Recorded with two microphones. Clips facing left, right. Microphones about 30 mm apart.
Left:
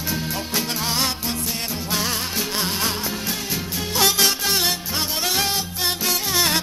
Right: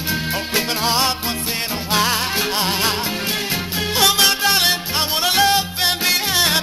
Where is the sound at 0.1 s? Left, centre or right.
Right.